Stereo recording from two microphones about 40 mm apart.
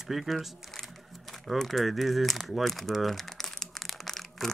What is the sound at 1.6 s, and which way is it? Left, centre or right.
Speech, centre.